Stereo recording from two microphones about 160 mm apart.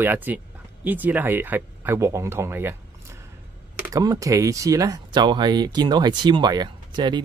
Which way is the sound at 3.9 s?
20° right (ahead or behind).